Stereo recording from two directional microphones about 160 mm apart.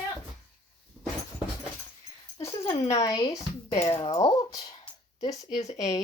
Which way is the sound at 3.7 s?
40° left (ahead or behind).